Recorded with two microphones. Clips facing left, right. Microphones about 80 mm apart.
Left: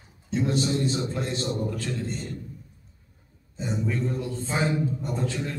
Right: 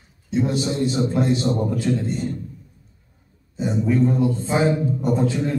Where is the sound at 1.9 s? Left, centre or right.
Centre.